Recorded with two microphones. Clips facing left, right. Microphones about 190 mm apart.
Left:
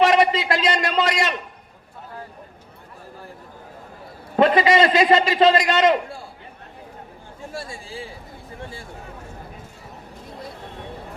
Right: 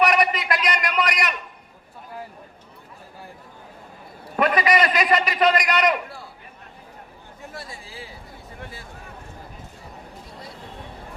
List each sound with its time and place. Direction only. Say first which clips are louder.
0.0 s a sound: left 4 dB; 25° left (ahead or behind)
4.4 s a man's voice: left 4 dB; 25° left (ahead or behind)
7.5 s a man's voice: left 6 dB; 30° left (ahead or behind)